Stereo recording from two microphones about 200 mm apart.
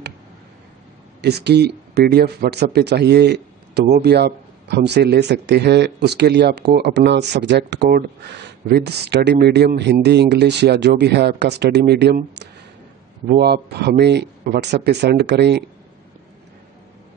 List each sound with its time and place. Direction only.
1.2 s a man's voice: 55° right (ahead or behind)